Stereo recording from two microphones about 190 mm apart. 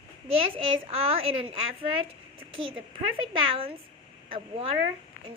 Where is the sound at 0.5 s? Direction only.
30° right (ahead or behind).